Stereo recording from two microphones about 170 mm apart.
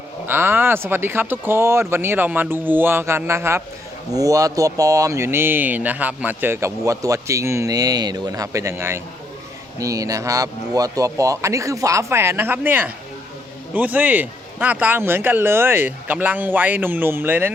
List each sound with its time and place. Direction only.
0.3 s speech: 15° right (ahead or behind)